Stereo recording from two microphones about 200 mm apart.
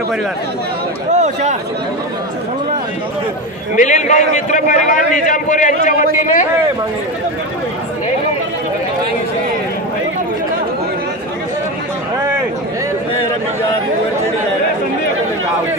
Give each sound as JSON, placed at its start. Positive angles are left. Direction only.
{"t": 1.1, "sound": "a man's voice", "side_deg": -35}
{"t": 3.7, "sound": "a man's voice", "side_deg": 40}
{"t": 12.2, "sound": "a sound", "side_deg": -10}